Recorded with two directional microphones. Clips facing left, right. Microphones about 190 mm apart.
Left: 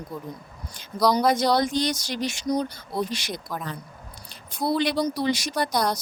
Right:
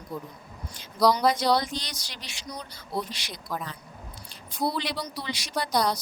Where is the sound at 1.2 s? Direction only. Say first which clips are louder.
Left 2 dB; 50° left (ahead or behind).